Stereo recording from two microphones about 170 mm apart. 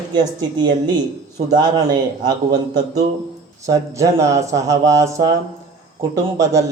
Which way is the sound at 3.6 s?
20° right (ahead or behind).